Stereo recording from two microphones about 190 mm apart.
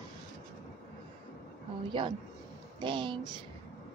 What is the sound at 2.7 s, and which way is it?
Speech, 25° right (ahead or behind).